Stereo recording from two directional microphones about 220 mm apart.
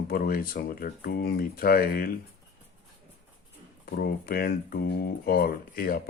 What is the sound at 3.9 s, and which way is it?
Speech, 45° left (ahead or behind).